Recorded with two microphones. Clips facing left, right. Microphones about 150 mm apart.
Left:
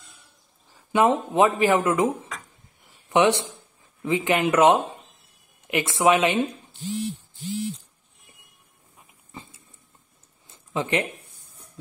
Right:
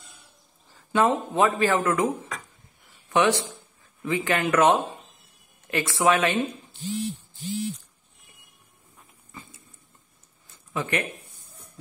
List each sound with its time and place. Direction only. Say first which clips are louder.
0.9 s speech: left 3 dB; 20° left (ahead or behind)
9.3 s dog: left 3 dB; 25° left (ahead or behind)
10.5 s a sound: left 3 dB; 20° left (ahead or behind)